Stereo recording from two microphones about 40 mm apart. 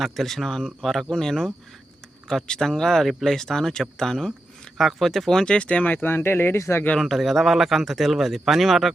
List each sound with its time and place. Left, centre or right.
0.0 s speech: centre
3.2 s speech: centre
4.8 s speech: centre
5.5 s speech: left
5.8 s speech: left
6.1 s speech: left
7.0 s speech: centre